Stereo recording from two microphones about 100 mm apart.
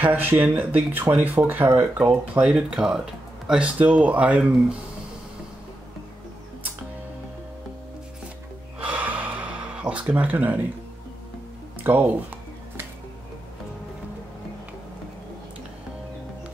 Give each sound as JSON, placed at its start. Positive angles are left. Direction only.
{"t": 0.0, "sound": "speech", "side_deg": -20}
{"t": 8.7, "sound": "gasp", "side_deg": -15}
{"t": 11.8, "sound": "a sound", "side_deg": -20}